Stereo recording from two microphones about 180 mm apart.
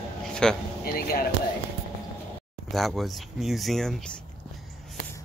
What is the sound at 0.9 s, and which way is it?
Speech, 55° left (ahead or behind).